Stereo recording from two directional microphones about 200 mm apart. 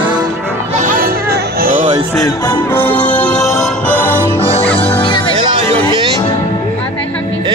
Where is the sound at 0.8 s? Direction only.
40° right (ahead or behind).